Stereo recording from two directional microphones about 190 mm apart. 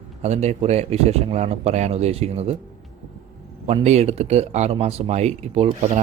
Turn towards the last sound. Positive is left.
turn(degrees=-30)  # may be behind; listen again after turning